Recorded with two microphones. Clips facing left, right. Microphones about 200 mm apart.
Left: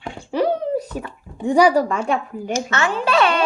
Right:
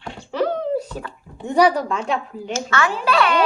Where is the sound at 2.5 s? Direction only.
25° left (ahead or behind).